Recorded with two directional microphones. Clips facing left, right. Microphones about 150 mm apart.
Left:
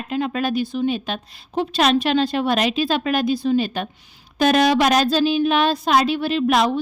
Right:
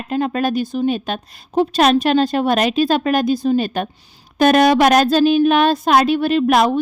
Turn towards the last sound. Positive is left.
turn(degrees=-50)  # may be behind; listen again after turning